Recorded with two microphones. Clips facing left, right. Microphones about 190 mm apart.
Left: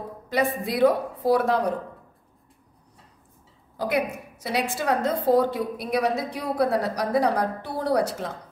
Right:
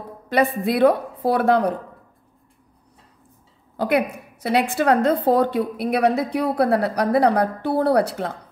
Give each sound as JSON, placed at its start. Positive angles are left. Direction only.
{"t": 0.3, "sound": "a woman's voice", "side_deg": -60}
{"t": 3.7, "sound": "a woman's voice", "side_deg": -60}